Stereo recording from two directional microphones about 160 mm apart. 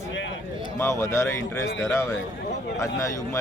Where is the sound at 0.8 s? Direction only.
15° left (ahead or behind).